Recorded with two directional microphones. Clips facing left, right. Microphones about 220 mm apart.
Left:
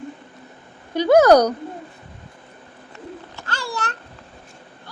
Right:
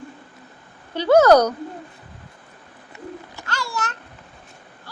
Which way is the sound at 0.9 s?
15° left (ahead or behind).